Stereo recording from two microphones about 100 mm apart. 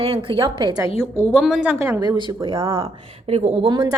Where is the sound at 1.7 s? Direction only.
30° right (ahead or behind).